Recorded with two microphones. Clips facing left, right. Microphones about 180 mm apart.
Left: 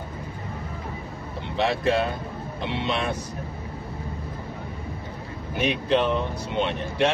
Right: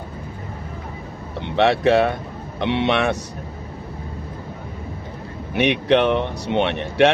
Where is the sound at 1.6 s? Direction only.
75° right (ahead or behind).